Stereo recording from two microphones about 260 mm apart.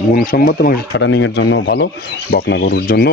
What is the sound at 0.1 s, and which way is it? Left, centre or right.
Speech, left.